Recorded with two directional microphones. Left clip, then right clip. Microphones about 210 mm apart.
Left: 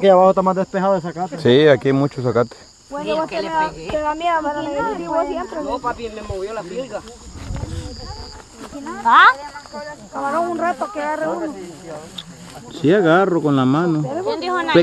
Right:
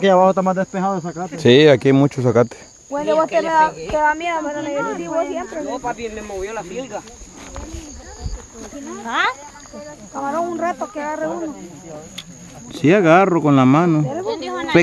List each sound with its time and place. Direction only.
0.0 s speech: 40° right (ahead or behind)
0.7 s speech: 5° right (ahead or behind)
1.4 s speech: 25° right (ahead or behind)
2.9 s speech: 50° right (ahead or behind)
4.2 s speech: 35° right (ahead or behind)
4.5 s speech: 5° right (ahead or behind)
5.7 s speech: 25° right (ahead or behind)
9.0 s speech: 45° left (ahead or behind)
10.1 s speech: 25° right (ahead or behind)
12.7 s speech: 20° right (ahead or behind)
14.2 s speech: 35° left (ahead or behind)